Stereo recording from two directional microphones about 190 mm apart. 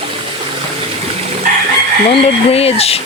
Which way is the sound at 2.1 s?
30° left (ahead or behind).